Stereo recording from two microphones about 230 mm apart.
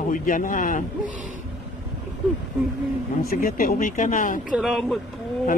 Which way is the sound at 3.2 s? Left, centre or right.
Left.